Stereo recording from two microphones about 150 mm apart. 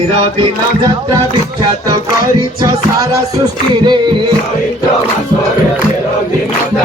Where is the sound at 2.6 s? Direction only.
20° right (ahead or behind).